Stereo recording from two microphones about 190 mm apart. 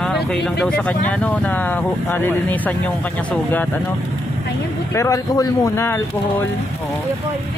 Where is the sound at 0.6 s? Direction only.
5° left (ahead or behind).